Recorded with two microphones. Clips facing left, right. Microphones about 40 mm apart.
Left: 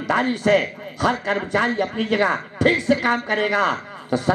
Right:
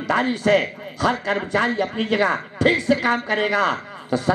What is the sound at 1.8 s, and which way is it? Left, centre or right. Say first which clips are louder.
A man's voice: even; right.